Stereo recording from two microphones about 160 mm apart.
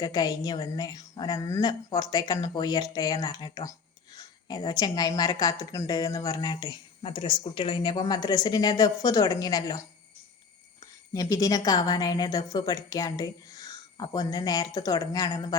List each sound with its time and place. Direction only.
0.0 s a woman's voice: 25° left (ahead or behind)
11.1 s a woman's voice: 20° left (ahead or behind)